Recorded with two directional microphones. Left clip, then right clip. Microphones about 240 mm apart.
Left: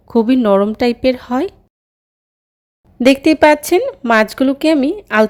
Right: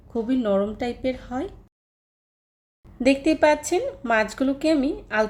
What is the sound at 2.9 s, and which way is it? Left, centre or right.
A woman's voice, left.